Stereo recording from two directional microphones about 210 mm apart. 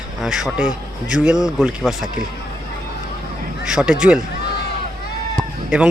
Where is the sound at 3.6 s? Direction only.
5° right (ahead or behind).